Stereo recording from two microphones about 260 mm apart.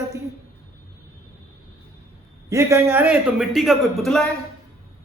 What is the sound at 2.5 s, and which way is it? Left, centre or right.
A man's voice, centre.